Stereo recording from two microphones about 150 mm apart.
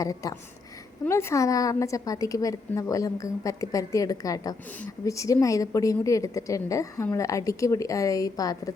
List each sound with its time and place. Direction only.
0.0 s a woman's voice: 20° left (ahead or behind)